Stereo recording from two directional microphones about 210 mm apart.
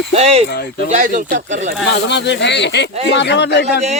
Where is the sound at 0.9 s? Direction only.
35° right (ahead or behind).